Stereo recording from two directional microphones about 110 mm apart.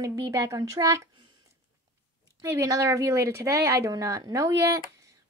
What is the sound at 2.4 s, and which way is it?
A woman's voice, 30° right (ahead or behind).